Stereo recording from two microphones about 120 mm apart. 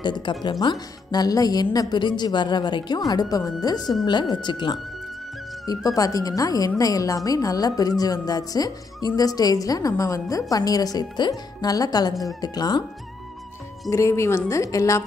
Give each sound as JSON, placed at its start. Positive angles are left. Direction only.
{"t": 0.0, "sound": "a woman's voice", "side_deg": 40}
{"t": 5.9, "sound": "a woman's voice", "side_deg": 30}
{"t": 13.8, "sound": "a woman's voice", "side_deg": 25}